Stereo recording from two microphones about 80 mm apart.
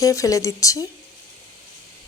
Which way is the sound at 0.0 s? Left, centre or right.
Left.